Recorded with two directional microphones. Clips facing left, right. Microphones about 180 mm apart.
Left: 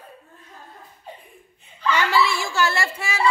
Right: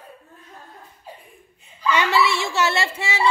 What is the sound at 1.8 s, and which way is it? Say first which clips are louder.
Female singing: right 1 dB; 20° right (ahead or behind).